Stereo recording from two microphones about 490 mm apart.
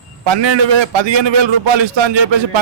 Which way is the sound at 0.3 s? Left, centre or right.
Right.